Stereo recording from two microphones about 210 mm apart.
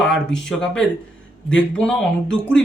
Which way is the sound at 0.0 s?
5° left (ahead or behind).